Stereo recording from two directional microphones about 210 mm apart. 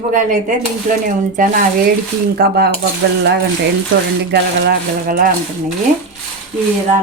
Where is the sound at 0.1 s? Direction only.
35° right (ahead or behind).